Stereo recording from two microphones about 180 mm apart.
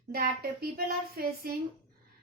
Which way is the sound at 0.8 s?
55° right (ahead or behind).